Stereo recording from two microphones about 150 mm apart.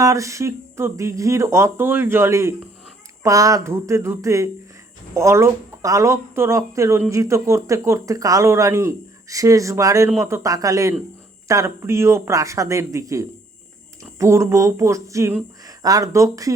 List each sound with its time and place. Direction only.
0.0 s speech: 20° right (ahead or behind)